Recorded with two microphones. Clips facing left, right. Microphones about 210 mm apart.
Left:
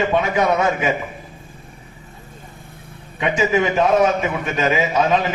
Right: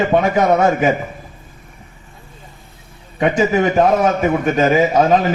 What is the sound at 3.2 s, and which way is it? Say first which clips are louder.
A man's voice: right 4 dB; 45° right (ahead or behind).